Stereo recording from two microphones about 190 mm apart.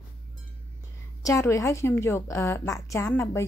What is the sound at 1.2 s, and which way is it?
A woman's voice, 15° left (ahead or behind).